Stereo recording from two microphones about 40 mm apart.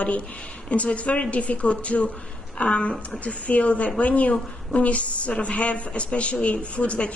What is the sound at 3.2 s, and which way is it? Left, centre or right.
A woman's voice, left.